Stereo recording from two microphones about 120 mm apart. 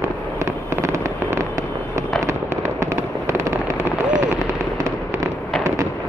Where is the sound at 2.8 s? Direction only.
25° right (ahead or behind).